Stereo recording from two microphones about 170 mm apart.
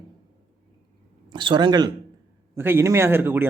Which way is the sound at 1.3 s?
25° right (ahead or behind).